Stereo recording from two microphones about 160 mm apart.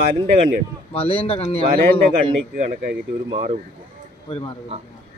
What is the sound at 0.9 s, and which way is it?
Speech, 35° left (ahead or behind).